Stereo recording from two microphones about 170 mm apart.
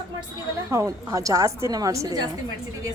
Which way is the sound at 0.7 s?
20° right (ahead or behind).